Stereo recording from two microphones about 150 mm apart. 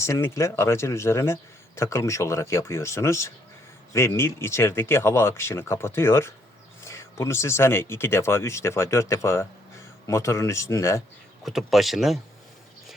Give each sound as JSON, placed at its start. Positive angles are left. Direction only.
{"t": 0.0, "sound": "speech", "side_deg": 20}
{"t": 11.4, "sound": "speech", "side_deg": 0}